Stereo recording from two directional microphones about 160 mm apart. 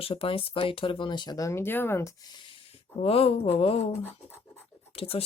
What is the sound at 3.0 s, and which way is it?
Speech, 35° left (ahead or behind).